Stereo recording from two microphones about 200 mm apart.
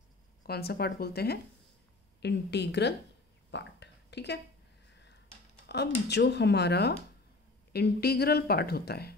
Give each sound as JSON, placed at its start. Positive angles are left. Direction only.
{"t": 0.5, "sound": "speech", "side_deg": 50}
{"t": 3.5, "sound": "a sound", "side_deg": 60}
{"t": 5.7, "sound": "speech", "side_deg": 55}